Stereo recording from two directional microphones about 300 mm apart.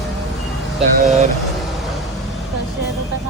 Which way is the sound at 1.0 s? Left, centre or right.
Right.